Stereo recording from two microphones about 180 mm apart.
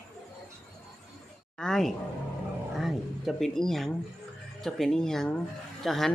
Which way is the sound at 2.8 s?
Centre (ahead or behind).